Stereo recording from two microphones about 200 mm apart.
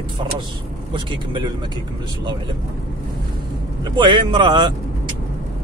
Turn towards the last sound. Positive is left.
turn(degrees=-25)  # may be behind; listen again after turning